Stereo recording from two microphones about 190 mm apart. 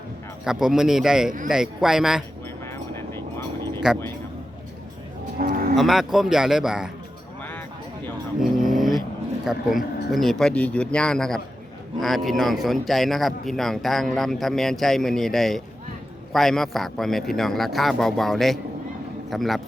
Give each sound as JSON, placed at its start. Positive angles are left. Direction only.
{"t": 0.4, "sound": "speech", "side_deg": -5}
{"t": 2.6, "sound": "vehicle", "side_deg": 15}
{"t": 3.8, "sound": "speech", "side_deg": -5}
{"t": 5.4, "sound": "moo", "side_deg": -50}
{"t": 5.7, "sound": "speech", "side_deg": 0}
{"t": 8.4, "sound": "dog", "side_deg": 0}
{"t": 9.4, "sound": "speech", "side_deg": 0}